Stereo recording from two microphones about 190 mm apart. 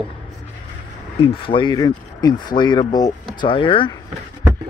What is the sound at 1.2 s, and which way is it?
Speech, 25° left (ahead or behind).